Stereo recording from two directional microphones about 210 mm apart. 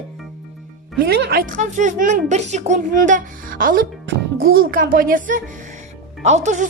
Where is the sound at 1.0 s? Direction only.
50° right (ahead or behind).